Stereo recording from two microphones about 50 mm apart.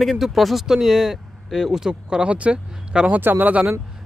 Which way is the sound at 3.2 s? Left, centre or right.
Right.